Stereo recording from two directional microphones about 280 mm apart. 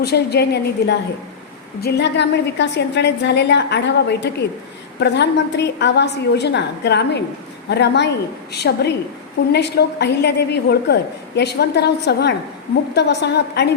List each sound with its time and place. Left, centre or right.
0.0 s a woman's voice: left